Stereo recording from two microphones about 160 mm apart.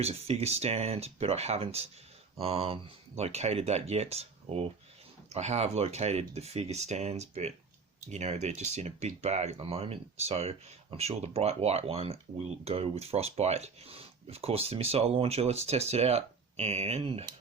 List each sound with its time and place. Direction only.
0.0 s speech: 40° right (ahead or behind)